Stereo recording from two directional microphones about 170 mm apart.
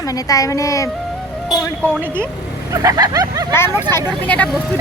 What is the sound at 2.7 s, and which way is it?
Vehicle, 20° right (ahead or behind).